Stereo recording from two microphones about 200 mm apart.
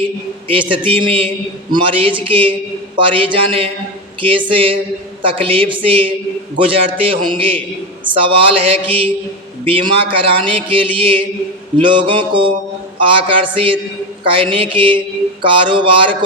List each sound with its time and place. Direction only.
0.4 s mantra: 25° right (ahead or behind)